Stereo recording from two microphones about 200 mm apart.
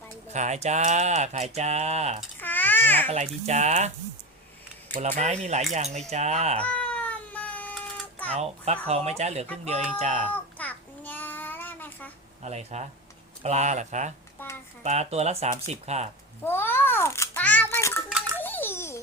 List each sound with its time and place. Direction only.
0.3 s speech: 35° right (ahead or behind)
2.4 s babbling: 10° left (ahead or behind)
3.1 s speech: 35° right (ahead or behind)
4.9 s speech: 35° right (ahead or behind)
6.6 s cat: 5° left (ahead or behind)
8.3 s speech: 30° right (ahead or behind)
10.2 s child singing: 5° left (ahead or behind)
12.4 s speech: 35° right (ahead or behind)
14.4 s a sound: 10° left (ahead or behind)
14.8 s speech: 35° right (ahead or behind)
16.4 s babbling: 10° left (ahead or behind)